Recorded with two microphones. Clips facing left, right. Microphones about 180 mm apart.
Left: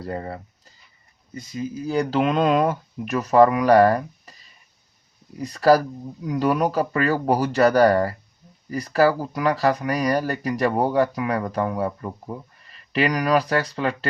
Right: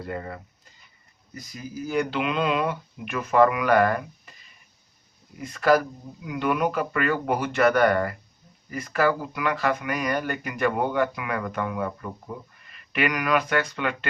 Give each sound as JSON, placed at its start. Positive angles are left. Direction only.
{"t": 0.0, "sound": "speech", "side_deg": 35}